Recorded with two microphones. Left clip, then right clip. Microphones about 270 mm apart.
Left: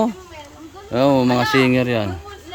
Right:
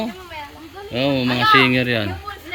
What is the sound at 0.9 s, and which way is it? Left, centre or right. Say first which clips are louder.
A man's voice: left 4 dB; centre.